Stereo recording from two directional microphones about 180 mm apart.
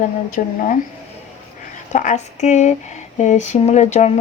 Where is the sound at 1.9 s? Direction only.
45° left (ahead or behind).